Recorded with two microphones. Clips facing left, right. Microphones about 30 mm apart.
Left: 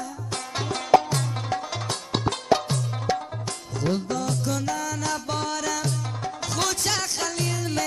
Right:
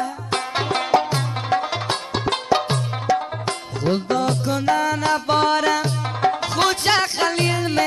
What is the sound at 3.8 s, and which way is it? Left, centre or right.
Music, right.